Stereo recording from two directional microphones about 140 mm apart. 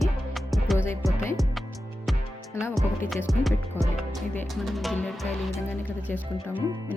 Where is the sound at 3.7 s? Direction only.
15° left (ahead or behind).